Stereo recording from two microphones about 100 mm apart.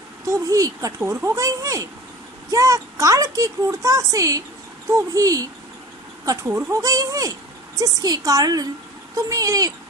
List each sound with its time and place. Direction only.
0.3 s speech: 35° right (ahead or behind)